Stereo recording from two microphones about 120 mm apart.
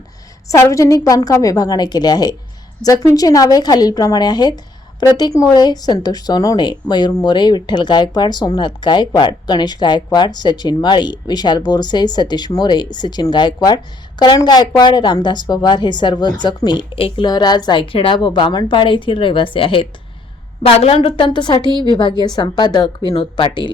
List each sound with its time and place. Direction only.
0.4 s a woman's voice: 25° left (ahead or behind); by 17.2 s 50° left (ahead or behind)
17.2 s a woman's voice: 35° left (ahead or behind)
20.6 s a woman's voice: 55° left (ahead or behind); by 23.7 s 40° left (ahead or behind)